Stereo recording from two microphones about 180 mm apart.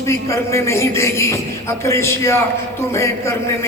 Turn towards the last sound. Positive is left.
turn(degrees=15)  # may be behind; listen again after turning